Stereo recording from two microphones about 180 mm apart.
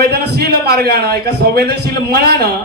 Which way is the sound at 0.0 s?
60° right (ahead or behind).